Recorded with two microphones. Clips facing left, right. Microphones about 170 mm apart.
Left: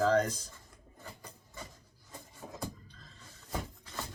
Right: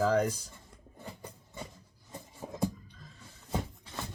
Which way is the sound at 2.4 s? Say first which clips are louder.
Right 4 dB; 20° right (ahead or behind).